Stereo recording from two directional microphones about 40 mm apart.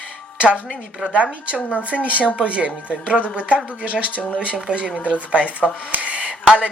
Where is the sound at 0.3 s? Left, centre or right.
Right.